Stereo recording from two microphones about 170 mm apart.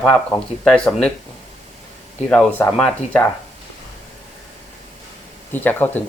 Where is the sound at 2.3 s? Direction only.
5° left (ahead or behind).